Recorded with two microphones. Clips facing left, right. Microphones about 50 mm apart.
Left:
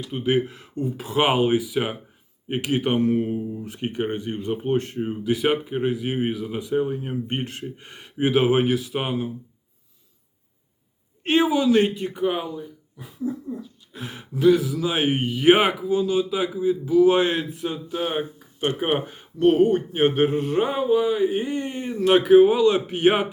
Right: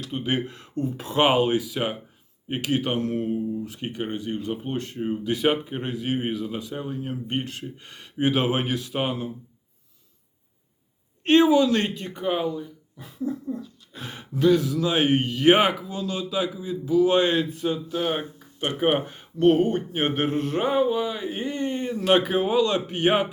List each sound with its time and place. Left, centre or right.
0.0 s speech: centre
3.7 s speech: left
4.9 s speech: centre
6.6 s speech: centre
11.3 s speech: centre